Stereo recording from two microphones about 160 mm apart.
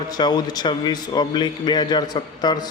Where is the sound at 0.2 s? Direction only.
25° left (ahead or behind).